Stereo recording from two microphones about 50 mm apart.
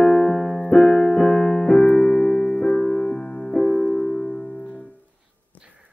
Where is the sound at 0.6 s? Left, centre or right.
Left.